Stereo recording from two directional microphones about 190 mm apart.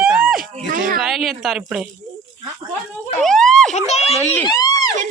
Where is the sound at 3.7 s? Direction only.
35° left (ahead or behind).